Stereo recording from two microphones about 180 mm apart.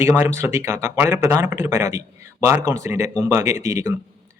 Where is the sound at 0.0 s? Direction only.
15° right (ahead or behind).